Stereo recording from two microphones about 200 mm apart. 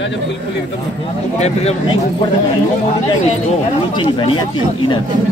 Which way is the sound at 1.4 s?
30° left (ahead or behind).